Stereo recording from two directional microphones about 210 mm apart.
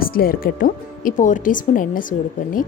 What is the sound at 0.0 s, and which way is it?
Speech, 45° left (ahead or behind).